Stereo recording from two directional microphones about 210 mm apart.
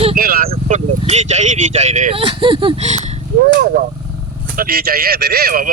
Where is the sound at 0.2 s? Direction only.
45° right (ahead or behind).